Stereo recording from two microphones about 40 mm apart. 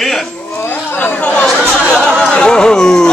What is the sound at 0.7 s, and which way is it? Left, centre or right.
Speech, left.